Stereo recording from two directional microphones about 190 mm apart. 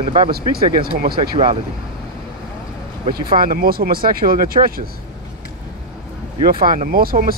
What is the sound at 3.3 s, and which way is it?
Speech, 50° right (ahead or behind).